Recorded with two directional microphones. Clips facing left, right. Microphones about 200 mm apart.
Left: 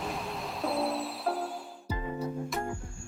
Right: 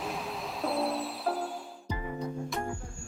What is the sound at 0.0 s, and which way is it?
Music, centre (ahead or behind).